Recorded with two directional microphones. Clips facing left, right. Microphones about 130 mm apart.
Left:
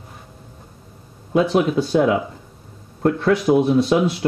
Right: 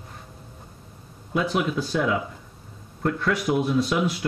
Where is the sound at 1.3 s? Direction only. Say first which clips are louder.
Left 7 dB; 30° left (ahead or behind).